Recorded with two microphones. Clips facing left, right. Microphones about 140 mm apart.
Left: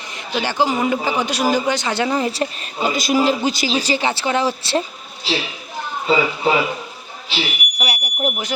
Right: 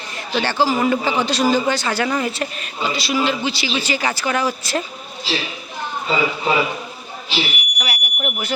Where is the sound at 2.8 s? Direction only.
45° left (ahead or behind); by 4.8 s 30° left (ahead or behind).